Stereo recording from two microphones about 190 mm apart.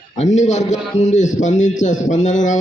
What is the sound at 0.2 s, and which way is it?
A man's voice, 40° left (ahead or behind).